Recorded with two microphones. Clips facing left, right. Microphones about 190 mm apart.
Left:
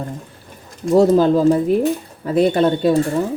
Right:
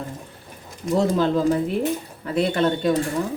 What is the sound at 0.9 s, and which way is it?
Speech, 40° left (ahead or behind).